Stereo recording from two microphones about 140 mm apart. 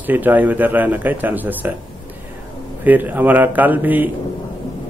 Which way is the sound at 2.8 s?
15° right (ahead or behind).